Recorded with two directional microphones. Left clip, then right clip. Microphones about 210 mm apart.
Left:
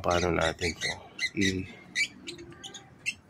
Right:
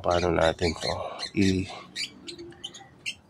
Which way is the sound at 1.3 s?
35° right (ahead or behind).